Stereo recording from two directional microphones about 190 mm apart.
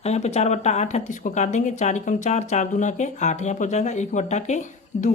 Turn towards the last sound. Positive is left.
turn(degrees=40)  # may be behind; listen again after turning